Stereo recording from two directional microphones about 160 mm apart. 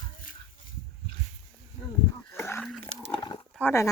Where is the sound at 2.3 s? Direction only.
15° left (ahead or behind).